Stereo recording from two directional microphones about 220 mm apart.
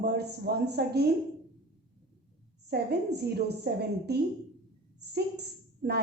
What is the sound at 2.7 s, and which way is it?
A woman's voice, 50° right (ahead or behind).